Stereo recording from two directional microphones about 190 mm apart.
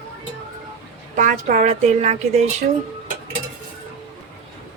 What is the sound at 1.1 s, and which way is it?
Speech, 40° right (ahead or behind).